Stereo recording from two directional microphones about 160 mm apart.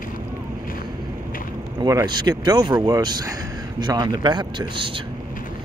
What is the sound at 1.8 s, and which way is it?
Speech, 25° right (ahead or behind).